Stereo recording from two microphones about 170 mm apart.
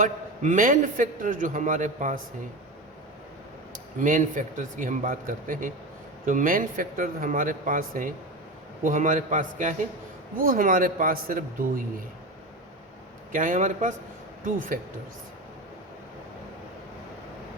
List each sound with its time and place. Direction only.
0.0 s a man's voice: 45° right (ahead or behind)
4.0 s a man's voice: 50° right (ahead or behind)
13.3 s a man's voice: 50° right (ahead or behind)